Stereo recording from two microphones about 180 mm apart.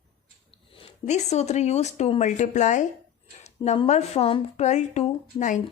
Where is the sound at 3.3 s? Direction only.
40° left (ahead or behind).